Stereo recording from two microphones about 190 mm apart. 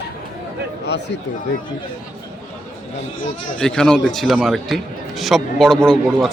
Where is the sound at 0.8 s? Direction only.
65° left (ahead or behind).